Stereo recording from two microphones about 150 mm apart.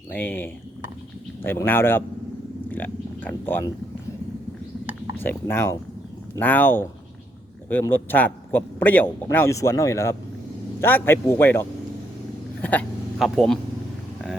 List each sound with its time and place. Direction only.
0.1 s a man's voice: 10° left (ahead or behind)
5.1 s a man's voice: 15° left (ahead or behind)
12.6 s speech: 10° left (ahead or behind)
13.1 s speech: centre (ahead or behind)